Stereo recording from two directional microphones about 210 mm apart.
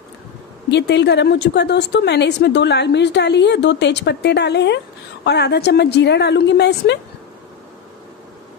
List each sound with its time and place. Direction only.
0.7 s a woman's voice: 55° left (ahead or behind)